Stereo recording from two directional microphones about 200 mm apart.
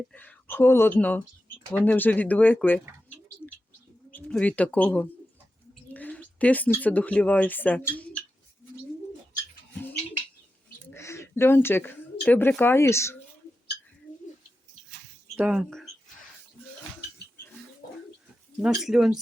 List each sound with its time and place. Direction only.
0.1 s speech: 10° left (ahead or behind)
4.1 s speech: 5° left (ahead or behind)
10.8 s a sound: 15° left (ahead or behind)
12.2 s speech: 10° left (ahead or behind)
15.4 s speech: 5° right (ahead or behind)
18.6 s speech: centre (ahead or behind)